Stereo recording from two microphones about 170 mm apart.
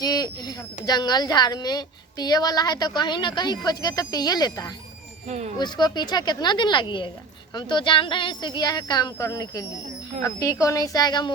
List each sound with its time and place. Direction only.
0.0 s a woman's voice: 20° left (ahead or behind)